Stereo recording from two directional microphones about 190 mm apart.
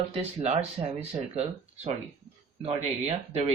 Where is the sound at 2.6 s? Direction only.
35° right (ahead or behind).